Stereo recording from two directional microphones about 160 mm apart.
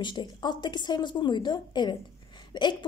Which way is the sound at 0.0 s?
30° left (ahead or behind).